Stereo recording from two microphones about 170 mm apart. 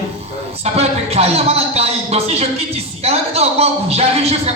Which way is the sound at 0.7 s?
35° right (ahead or behind).